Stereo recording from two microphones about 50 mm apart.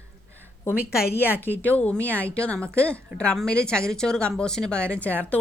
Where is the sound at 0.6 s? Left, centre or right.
Left.